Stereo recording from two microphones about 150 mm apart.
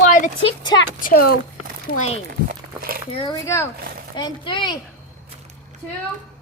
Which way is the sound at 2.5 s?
75° right (ahead or behind).